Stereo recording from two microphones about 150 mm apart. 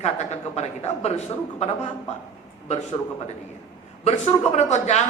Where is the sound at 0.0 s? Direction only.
50° left (ahead or behind).